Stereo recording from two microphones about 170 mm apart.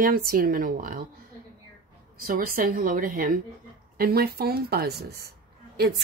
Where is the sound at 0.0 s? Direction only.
60° right (ahead or behind).